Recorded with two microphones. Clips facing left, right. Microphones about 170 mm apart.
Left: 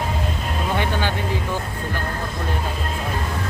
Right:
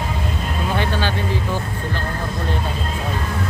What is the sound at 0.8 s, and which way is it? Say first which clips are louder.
Vehicle: right 2 dB; 15° left (ahead or behind).